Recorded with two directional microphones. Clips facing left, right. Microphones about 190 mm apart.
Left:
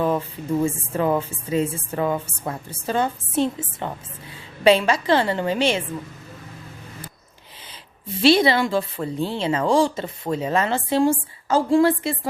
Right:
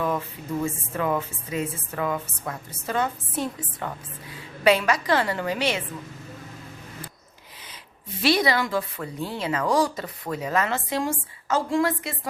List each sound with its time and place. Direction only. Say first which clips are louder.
0.0 s a woman's voice: left 5 dB; 30° left (ahead or behind)
8.2 s a woman's voice: left 5 dB; 25° left (ahead or behind)